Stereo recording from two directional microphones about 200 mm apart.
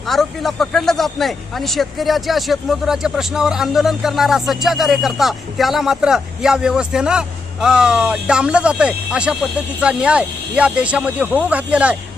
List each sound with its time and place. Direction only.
0.0 s speech: centre (ahead or behind)